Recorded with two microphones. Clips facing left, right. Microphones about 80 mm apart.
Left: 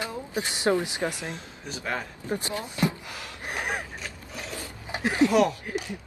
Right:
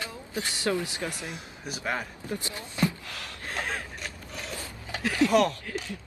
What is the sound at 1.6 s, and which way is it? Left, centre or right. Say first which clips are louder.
Speech: even; centre.